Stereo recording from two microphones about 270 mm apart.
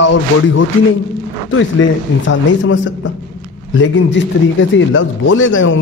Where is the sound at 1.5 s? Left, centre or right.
Left.